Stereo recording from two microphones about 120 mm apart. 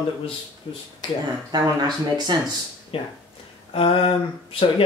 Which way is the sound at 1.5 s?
35° right (ahead or behind).